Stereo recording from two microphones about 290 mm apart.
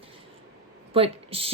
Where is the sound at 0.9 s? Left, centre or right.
Centre.